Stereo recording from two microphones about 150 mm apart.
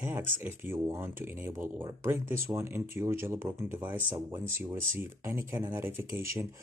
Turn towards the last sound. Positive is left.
turn(degrees=-20)  # may be behind; listen again after turning